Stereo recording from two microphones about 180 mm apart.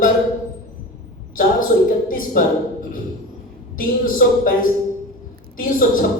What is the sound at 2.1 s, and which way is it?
Speech, 50° left (ahead or behind).